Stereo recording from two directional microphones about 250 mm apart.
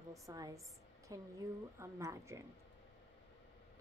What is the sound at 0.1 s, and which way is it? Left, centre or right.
A woman's voice, centre.